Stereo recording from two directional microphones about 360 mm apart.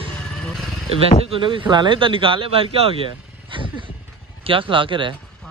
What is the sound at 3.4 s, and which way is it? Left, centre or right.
Vehicle, centre.